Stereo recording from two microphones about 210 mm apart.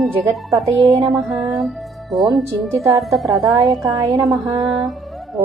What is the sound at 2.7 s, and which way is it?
Speech, 15° right (ahead or behind).